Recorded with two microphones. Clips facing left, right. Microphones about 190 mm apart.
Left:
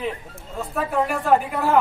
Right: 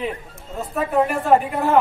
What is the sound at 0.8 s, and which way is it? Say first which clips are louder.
A man's voice: right 3 dB; centre (ahead or behind).